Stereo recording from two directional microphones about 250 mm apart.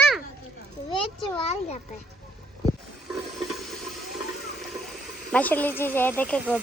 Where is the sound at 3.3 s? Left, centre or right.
Centre.